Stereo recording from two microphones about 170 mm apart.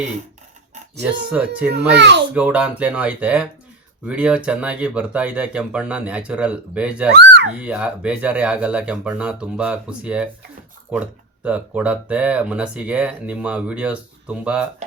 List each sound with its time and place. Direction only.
1.3 s speech: 5° right (ahead or behind)
1.9 s a child's voice: 85° right
2.3 s speech: 5° right (ahead or behind)
7.1 s a sound: 75° right (ahead or behind)
7.6 s speech: 5° right (ahead or behind)
11.4 s speech: 10° right (ahead or behind)